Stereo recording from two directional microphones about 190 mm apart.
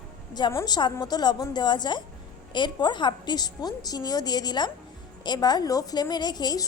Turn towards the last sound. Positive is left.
turn(degrees=20)  # may be behind; listen again after turning